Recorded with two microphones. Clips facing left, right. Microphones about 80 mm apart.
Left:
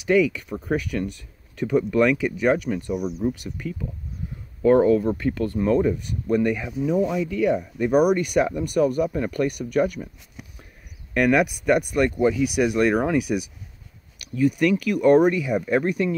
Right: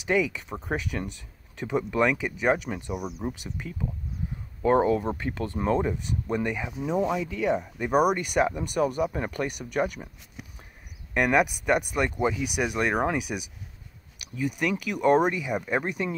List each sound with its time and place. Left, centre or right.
0.0 s speech: right
11.1 s speech: right